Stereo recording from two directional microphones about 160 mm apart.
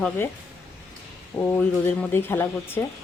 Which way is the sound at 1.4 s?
10° left (ahead or behind).